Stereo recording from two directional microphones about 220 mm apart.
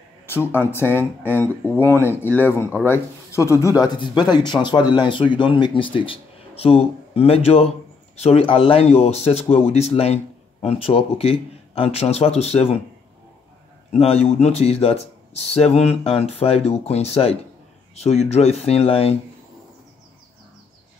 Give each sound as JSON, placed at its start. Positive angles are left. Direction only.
{"t": 0.3, "sound": "speech", "side_deg": 10}
{"t": 13.9, "sound": "speech", "side_deg": 30}